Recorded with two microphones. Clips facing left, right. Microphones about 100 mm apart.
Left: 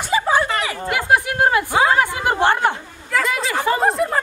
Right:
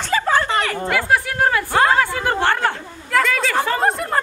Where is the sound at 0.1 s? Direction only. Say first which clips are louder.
Even; 15° left (ahead or behind).